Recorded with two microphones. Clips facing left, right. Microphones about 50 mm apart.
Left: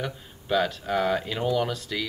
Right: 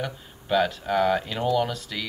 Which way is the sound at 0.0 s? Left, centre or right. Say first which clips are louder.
Right 1 dB; centre.